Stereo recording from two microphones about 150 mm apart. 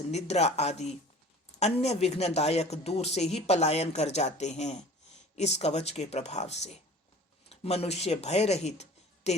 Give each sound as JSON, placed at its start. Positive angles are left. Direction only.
{"t": 0.1, "sound": "speech", "side_deg": 45}